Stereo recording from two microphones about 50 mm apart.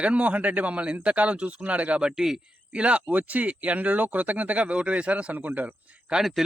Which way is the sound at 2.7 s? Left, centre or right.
Right.